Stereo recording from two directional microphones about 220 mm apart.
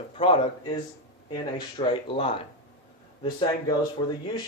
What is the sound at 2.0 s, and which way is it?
Speech, 25° left (ahead or behind).